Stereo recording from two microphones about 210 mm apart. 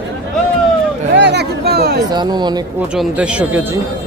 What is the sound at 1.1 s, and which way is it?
Speech, 55° right (ahead or behind).